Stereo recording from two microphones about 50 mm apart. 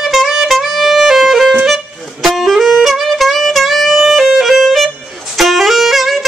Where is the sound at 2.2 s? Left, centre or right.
Centre.